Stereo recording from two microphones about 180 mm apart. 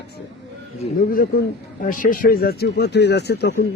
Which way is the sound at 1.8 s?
50° left (ahead or behind).